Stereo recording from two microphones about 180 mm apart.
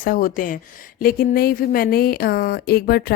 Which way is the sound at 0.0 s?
50° left (ahead or behind).